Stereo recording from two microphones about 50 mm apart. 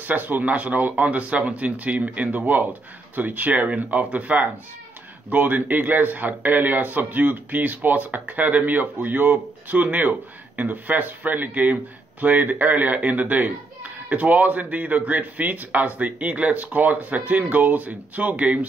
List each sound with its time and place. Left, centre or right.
0.0 s a man's voice: right